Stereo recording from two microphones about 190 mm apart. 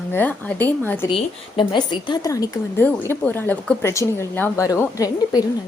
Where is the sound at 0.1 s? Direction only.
10° left (ahead or behind).